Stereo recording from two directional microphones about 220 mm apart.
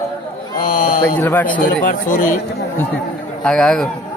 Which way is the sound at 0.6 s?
35° left (ahead or behind).